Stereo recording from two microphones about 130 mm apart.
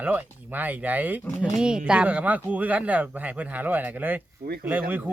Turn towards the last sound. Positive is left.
turn(degrees=-15)  # may be behind; listen again after turning